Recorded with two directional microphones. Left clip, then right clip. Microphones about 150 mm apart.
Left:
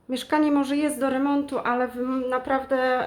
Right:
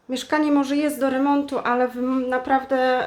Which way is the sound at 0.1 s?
Centre (ahead or behind).